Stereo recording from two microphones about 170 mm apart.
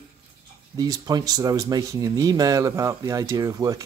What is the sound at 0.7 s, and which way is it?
Speech, 20° right (ahead or behind).